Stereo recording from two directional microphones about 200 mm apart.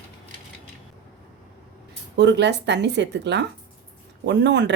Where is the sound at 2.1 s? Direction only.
60° right (ahead or behind).